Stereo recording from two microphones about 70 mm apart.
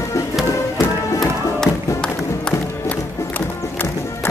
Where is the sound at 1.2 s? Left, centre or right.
Centre.